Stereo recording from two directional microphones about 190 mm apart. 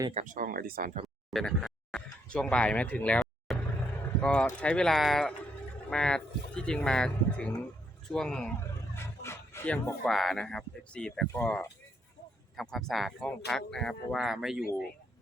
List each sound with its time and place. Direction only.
0.1 s speech: 40° right (ahead or behind)
1.3 s a sound: centre (ahead or behind)
4.2 s speech: 5° left (ahead or behind)